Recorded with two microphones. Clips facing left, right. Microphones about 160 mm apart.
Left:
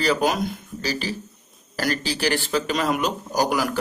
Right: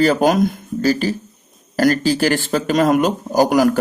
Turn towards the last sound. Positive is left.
turn(degrees=-45)  # may be behind; listen again after turning